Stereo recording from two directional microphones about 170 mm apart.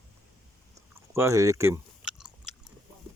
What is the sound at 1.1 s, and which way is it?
Speech, 15° right (ahead or behind).